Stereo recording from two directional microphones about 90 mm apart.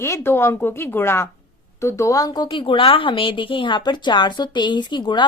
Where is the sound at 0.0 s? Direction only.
30° left (ahead or behind).